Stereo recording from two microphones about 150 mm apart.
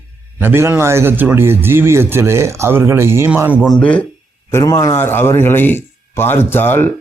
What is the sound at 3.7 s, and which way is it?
Speech, 10° left (ahead or behind).